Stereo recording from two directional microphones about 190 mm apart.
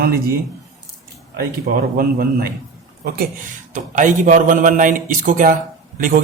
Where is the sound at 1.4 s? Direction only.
50° right (ahead or behind).